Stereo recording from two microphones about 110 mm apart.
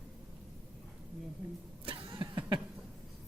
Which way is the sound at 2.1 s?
50° right (ahead or behind).